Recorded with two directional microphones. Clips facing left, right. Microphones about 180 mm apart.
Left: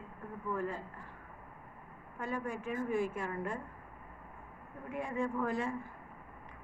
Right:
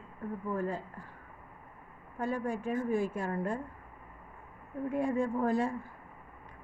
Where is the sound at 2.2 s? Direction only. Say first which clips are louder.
Right 5 dB; 35° right (ahead or behind).